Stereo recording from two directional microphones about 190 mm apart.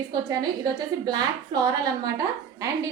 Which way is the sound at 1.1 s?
20° right (ahead or behind).